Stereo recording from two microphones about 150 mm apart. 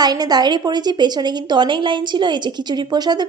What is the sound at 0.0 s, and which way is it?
A woman's voice, 25° right (ahead or behind).